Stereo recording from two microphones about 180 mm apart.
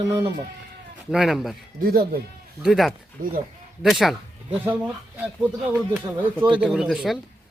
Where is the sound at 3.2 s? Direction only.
50° right (ahead or behind).